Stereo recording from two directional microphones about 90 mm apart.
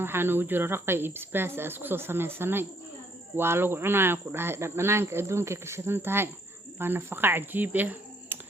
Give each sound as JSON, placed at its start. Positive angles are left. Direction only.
{"t": 0.0, "sound": "speech", "side_deg": -25}